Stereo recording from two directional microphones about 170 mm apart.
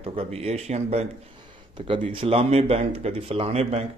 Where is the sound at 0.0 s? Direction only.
35° right (ahead or behind).